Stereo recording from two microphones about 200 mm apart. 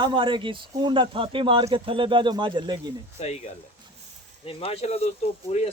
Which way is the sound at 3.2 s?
35° left (ahead or behind).